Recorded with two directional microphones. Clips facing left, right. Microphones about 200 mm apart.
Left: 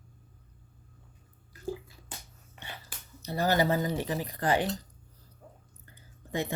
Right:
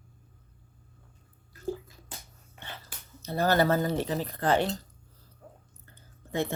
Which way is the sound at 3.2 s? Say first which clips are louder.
Right 2 dB; 15° left (ahead or behind).